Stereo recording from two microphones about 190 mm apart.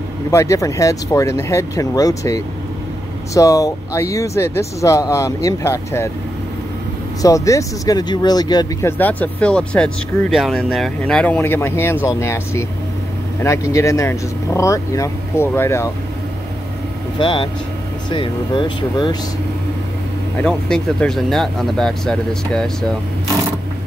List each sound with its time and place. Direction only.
0.3 s speech: 15° left (ahead or behind)
7.2 s speech: 15° left (ahead or behind)
8.9 s speech: 10° left (ahead or behind)
17.2 s speech: 25° left (ahead or behind)
20.4 s speech: 5° left (ahead or behind)